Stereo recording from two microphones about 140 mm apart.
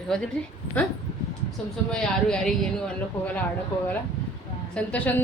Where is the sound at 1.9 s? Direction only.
5° left (ahead or behind).